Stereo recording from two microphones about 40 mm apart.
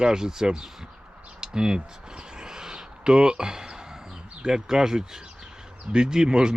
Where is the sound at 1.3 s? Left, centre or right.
Centre.